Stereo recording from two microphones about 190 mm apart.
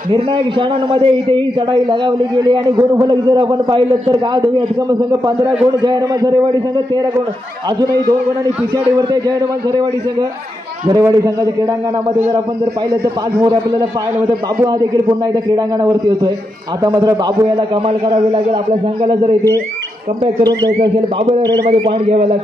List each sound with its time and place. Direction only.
0.1 s a man's voice: 25° right (ahead or behind)
5.9 s a man's voice: 20° right (ahead or behind)
10.9 s a man's voice: 15° right (ahead or behind)
13.4 s a man's voice: 25° right (ahead or behind)
17.8 s a man's voice: 30° right (ahead or behind)
20.3 s a man's voice: 25° right (ahead or behind)